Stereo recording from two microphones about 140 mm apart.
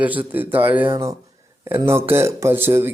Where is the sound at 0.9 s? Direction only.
25° right (ahead or behind).